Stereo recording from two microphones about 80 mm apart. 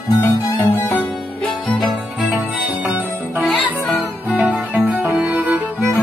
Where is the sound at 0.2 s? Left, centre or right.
Left.